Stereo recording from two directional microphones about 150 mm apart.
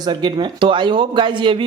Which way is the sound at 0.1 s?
30° right (ahead or behind).